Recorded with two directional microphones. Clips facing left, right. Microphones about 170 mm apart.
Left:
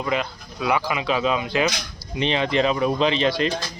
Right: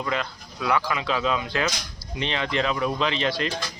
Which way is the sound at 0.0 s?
15° left (ahead or behind).